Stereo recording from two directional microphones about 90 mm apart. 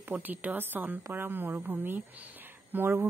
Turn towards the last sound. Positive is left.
turn(degrees=-25)  # may be behind; listen again after turning